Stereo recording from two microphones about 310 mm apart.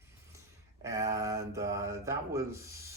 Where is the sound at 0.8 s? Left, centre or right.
Centre.